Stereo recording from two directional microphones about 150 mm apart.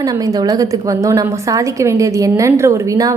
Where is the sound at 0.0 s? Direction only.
25° right (ahead or behind).